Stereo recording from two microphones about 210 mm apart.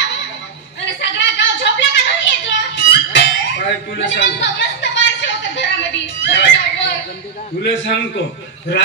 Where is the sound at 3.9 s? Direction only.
60° left (ahead or behind).